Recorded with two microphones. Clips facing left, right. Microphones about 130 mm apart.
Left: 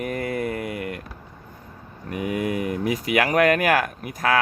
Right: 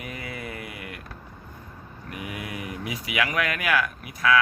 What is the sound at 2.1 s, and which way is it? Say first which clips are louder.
Speech: left 10 dB; 45° left (ahead or behind).